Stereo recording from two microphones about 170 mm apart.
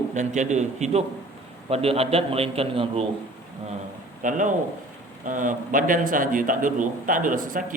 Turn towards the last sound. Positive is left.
turn(degrees=-50)  # may be behind; listen again after turning